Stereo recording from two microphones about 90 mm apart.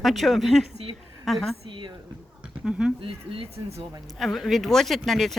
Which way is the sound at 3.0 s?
85° right.